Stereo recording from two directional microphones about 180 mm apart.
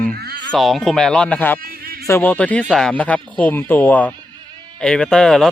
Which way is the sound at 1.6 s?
55° right (ahead or behind).